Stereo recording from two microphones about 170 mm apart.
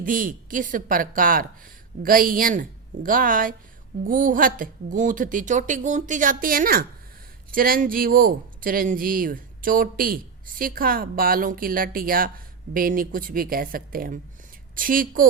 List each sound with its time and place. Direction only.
0.0 s a woman's voice: 55° right (ahead or behind)